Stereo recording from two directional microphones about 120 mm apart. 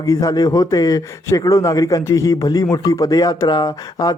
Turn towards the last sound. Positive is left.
turn(degrees=35)  # may be behind; listen again after turning